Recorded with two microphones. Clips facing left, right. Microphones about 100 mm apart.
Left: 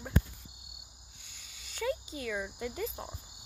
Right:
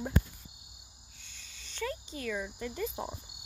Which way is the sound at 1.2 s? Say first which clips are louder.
Right 1 dB; 10° left (ahead or behind).